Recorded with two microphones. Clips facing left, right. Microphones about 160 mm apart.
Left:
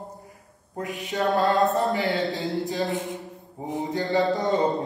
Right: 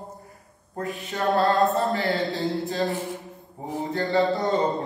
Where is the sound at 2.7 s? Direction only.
20° left (ahead or behind).